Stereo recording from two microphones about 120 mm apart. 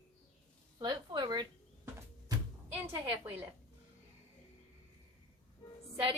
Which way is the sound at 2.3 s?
30° right (ahead or behind).